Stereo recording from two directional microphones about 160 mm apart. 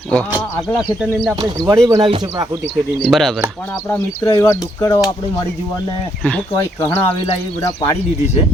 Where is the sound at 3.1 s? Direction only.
Centre (ahead or behind).